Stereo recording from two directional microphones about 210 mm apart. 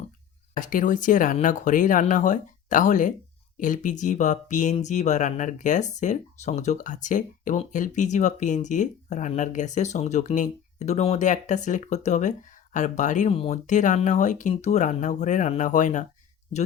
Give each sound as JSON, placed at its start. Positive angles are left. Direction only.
{"t": 0.5, "sound": "speech", "side_deg": 40}